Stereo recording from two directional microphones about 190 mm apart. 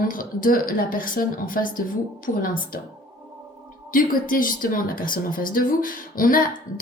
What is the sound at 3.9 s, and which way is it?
Speech, 45° left (ahead or behind).